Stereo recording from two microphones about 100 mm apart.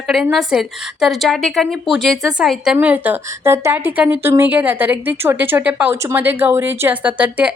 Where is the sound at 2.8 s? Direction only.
15° right (ahead or behind).